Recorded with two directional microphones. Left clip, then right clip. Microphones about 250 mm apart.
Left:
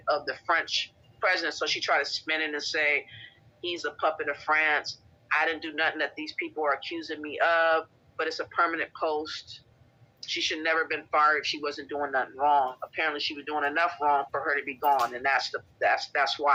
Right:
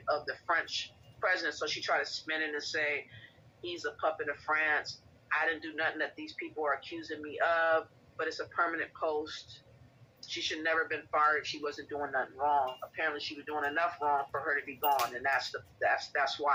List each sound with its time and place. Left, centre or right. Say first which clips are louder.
0.0 s speech: left 5 dB; left